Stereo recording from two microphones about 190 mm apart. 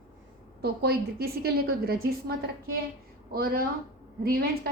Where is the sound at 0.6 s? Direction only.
55° right (ahead or behind).